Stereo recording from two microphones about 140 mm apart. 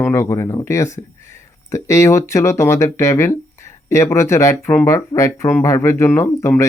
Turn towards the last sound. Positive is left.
turn(degrees=20)  # may be behind; listen again after turning